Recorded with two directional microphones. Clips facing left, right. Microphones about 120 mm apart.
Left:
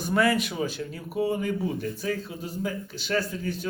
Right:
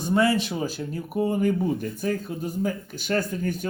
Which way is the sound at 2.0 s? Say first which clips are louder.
Right 3 dB; 50° right (ahead or behind).